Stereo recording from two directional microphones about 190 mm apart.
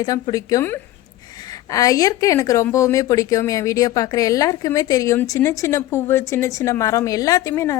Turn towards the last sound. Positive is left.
turn(degrees=15)  # may be behind; listen again after turning